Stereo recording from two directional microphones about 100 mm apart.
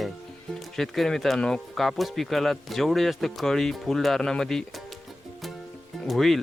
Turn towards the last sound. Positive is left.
turn(degrees=0)  # may be behind; listen again after turning